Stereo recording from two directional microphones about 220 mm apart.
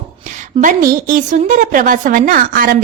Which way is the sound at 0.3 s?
35° right (ahead or behind).